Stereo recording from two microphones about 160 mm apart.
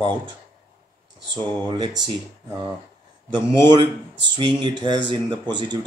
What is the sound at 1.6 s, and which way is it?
Speech, 25° right (ahead or behind).